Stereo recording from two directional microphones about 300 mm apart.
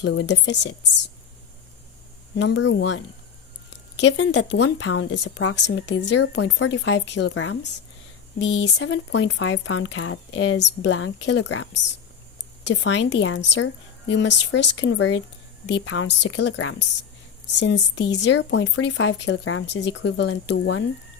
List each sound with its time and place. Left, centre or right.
0.0 s speech: left
2.3 s speech: left